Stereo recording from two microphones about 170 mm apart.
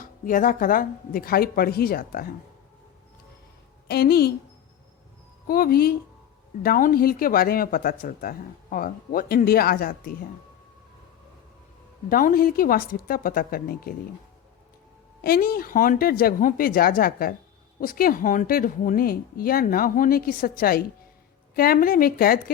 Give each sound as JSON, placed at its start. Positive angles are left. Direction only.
{"t": 0.0, "sound": "speech", "side_deg": 50}
{"t": 3.8, "sound": "a woman's voice", "side_deg": 65}
{"t": 5.5, "sound": "speech", "side_deg": 60}
{"t": 12.0, "sound": "speech", "side_deg": 55}
{"t": 15.2, "sound": "speech", "side_deg": 60}